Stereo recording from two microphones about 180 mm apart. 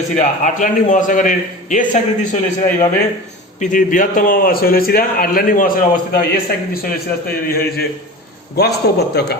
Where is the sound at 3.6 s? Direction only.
45° left (ahead or behind).